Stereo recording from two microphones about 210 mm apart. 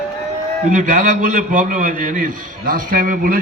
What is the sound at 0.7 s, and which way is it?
A man's voice, 40° right (ahead or behind).